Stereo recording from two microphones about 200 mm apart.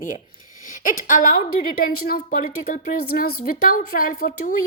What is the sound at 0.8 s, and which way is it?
A woman's voice, 40° left (ahead or behind).